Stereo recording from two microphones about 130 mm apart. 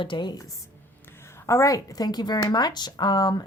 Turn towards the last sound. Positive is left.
turn(degrees=30)  # may be behind; listen again after turning